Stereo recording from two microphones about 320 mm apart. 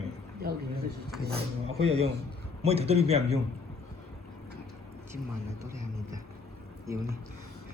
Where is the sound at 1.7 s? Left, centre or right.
Centre.